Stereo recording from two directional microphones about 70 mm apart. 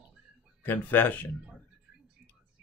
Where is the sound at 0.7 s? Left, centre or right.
Left.